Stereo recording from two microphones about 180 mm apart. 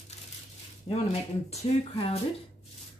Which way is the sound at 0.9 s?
30° left (ahead or behind).